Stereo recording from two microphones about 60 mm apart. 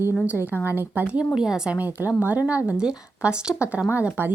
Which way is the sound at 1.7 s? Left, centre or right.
Right.